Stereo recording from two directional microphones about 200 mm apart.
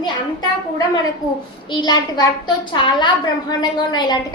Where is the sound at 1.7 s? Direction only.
20° left (ahead or behind).